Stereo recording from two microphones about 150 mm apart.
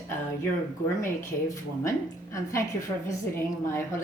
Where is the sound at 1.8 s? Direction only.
20° left (ahead or behind).